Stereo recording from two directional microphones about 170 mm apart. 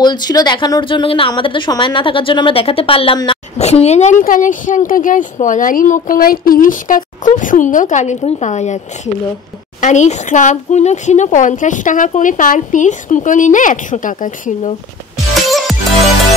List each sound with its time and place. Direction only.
0.0 s speech: 25° left (ahead or behind); by 14.7 s 50° left (ahead or behind)